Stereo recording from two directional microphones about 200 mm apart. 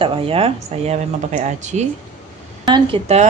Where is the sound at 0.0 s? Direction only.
25° right (ahead or behind).